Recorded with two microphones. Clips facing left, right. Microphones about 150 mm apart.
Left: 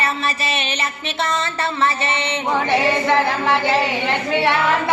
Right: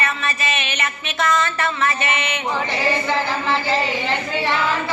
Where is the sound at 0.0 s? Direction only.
30° left (ahead or behind).